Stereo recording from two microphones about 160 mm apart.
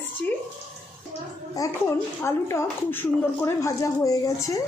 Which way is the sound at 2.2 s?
15° left (ahead or behind).